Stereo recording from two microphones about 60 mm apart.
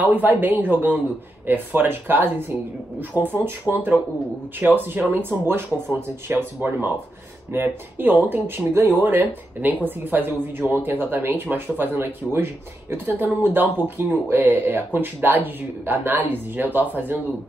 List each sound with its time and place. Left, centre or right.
0.0 s speech: right